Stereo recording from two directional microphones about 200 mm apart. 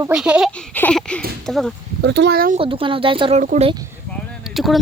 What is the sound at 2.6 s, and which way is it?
Speech, 25° right (ahead or behind).